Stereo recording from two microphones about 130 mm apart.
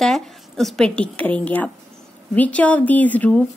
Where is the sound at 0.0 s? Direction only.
Centre (ahead or behind).